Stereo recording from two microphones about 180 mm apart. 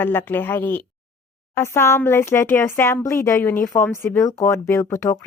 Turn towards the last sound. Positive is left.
turn(degrees=15)  # may be behind; listen again after turning